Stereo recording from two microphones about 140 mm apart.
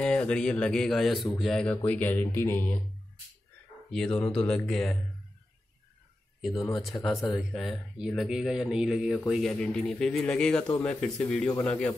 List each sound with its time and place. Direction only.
0.0 s speech: 5° left (ahead or behind)
3.9 s speech: 5° left (ahead or behind)
6.4 s speech: centre (ahead or behind)
6.9 s speech: 15° left (ahead or behind)
7.2 s speech: centre (ahead or behind)